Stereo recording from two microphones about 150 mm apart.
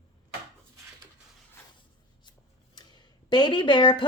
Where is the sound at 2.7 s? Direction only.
30° left (ahead or behind).